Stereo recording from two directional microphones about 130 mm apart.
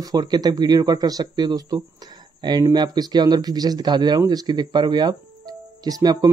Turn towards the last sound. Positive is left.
turn(degrees=-30)  # may be behind; listen again after turning